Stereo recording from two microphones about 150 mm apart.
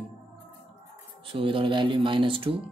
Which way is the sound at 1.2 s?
35° right (ahead or behind).